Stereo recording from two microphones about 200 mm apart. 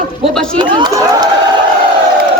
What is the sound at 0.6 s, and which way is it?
Speech, 20° right (ahead or behind).